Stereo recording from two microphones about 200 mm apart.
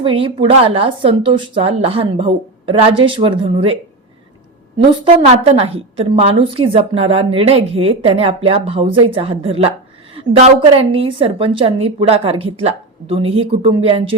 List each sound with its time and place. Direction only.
0.0 s a woman's voice: 25° right (ahead or behind)
5.3 s a woman's voice: 30° right (ahead or behind)